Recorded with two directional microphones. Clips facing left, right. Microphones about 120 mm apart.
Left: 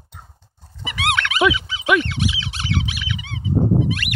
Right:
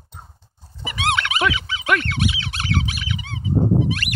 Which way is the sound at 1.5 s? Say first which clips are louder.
Right 1 dB; 65° right (ahead or behind).